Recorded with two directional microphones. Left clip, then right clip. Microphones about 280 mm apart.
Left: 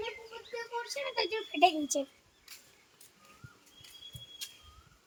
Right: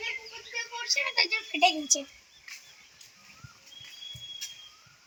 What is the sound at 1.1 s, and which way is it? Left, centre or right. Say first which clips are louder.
Speech: even; left.